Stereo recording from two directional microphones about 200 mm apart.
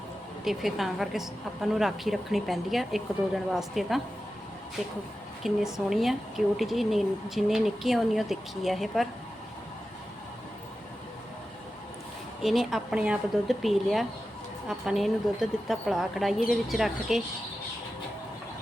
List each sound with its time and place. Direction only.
0.4 s speech: centre (ahead or behind)
5.4 s speech: centre (ahead or behind)
12.4 s speech: centre (ahead or behind)